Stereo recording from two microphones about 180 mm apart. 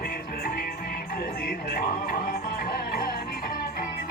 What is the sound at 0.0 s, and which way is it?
Music, 55° left (ahead or behind).